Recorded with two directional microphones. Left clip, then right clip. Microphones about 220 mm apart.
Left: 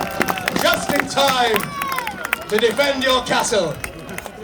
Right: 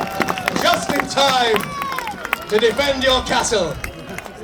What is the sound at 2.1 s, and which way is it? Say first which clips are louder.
Run: even; 45° left (ahead or behind).